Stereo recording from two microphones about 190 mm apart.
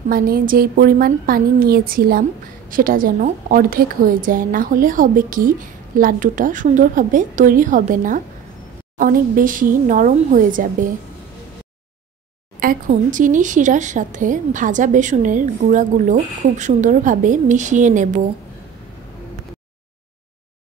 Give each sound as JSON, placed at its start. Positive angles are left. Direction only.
{"t": 0.1, "sound": "a woman's voice", "side_deg": -50}
{"t": 12.5, "sound": "speech", "side_deg": -45}